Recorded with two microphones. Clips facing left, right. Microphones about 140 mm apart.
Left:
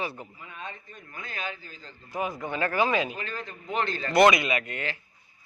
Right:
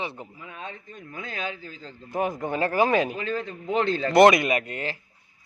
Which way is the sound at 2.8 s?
50° right (ahead or behind).